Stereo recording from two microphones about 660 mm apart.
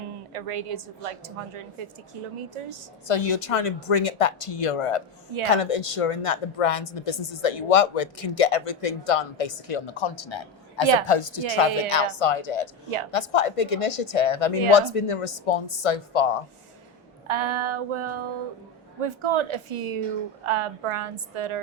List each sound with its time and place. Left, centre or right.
0.3 s a woman's voice: right
3.1 s a woman's voice: left
17.2 s a woman's voice: right